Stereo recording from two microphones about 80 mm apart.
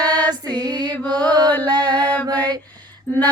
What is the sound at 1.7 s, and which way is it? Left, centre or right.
Music, right.